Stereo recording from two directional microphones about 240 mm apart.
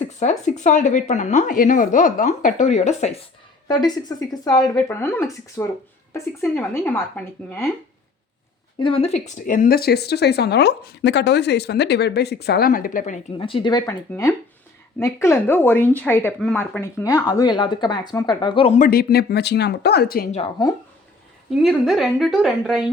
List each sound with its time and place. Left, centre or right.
0.2 s speech: left
3.7 s speech: centre
8.8 s speech: left
13.4 s speech: left
18.9 s speech: left
20.3 s speech: left
21.6 s a woman's voice: centre